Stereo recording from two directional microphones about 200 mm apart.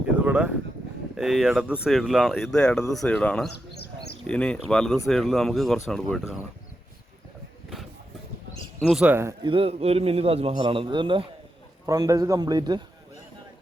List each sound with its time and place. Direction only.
0.2 s a sound: 5° right (ahead or behind)
1.1 s speech: centre (ahead or behind)
8.8 s speech: centre (ahead or behind)
9.5 s a man's voice: 30° right (ahead or behind)